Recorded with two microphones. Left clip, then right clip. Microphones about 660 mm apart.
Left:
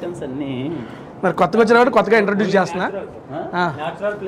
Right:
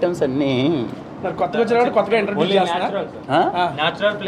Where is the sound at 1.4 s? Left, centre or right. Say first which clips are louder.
Left 4 dB; left.